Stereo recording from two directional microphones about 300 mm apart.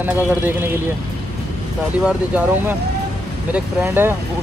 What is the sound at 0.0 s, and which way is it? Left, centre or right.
Speech, centre.